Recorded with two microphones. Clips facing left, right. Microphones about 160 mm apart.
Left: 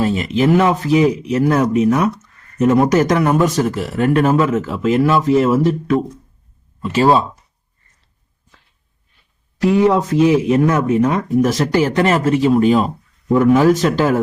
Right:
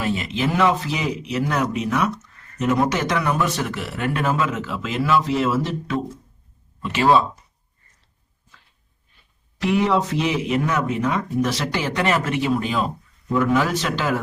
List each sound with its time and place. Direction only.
0.0 s speech: 40° left (ahead or behind)
9.6 s speech: 40° left (ahead or behind)